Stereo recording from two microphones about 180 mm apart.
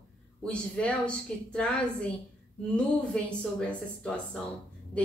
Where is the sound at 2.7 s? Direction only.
5° left (ahead or behind).